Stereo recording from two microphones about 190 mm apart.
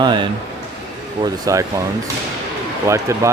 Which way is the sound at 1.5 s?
15° right (ahead or behind).